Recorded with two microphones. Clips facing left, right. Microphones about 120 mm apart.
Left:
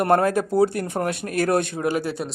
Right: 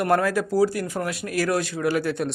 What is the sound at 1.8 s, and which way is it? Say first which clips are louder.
Speech: even; 35° left (ahead or behind).